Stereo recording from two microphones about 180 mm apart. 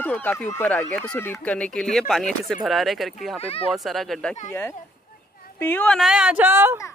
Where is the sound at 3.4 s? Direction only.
30° left (ahead or behind).